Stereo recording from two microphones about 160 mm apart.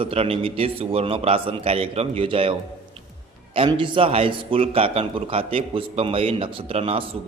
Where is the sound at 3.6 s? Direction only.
30° right (ahead or behind).